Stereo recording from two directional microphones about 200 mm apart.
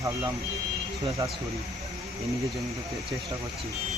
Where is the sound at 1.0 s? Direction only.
15° right (ahead or behind).